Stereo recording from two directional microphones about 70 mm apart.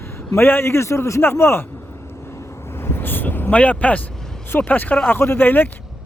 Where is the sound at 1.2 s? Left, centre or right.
Left.